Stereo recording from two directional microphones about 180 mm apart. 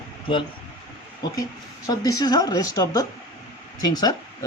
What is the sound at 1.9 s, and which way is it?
Speech, 20° left (ahead or behind).